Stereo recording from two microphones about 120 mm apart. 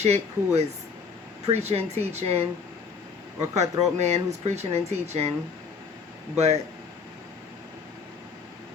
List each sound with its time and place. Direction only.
0.0 s speech: 65° right (ahead or behind)
3.5 s speech: 70° right (ahead or behind)
6.3 s speech: 65° right (ahead or behind)